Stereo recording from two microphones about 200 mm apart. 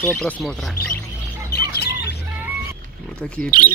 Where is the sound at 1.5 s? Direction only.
50° left (ahead or behind).